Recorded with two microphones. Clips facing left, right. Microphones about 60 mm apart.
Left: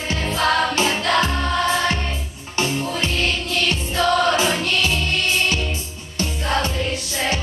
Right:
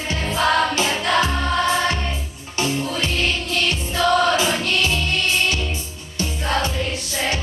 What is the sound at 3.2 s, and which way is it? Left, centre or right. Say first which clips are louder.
Music: even; centre.